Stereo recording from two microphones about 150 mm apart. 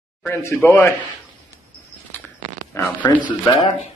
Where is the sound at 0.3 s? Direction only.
15° left (ahead or behind).